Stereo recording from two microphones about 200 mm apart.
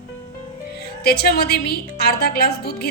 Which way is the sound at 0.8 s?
55° left (ahead or behind).